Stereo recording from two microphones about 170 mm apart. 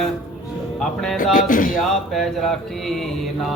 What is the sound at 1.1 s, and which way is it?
Speech, 55° left (ahead or behind).